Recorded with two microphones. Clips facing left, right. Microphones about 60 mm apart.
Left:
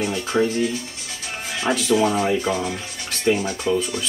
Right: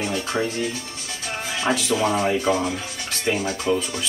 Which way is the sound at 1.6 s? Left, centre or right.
Centre.